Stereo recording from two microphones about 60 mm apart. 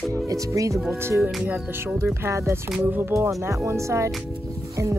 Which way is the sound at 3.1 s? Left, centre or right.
Right.